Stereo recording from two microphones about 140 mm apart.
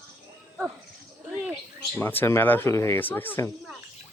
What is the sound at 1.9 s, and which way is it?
Speech, 15° left (ahead or behind).